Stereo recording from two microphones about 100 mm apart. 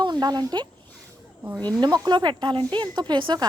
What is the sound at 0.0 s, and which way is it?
Speech, 45° right (ahead or behind).